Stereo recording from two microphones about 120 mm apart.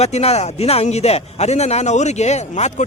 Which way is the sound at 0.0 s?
60° left (ahead or behind).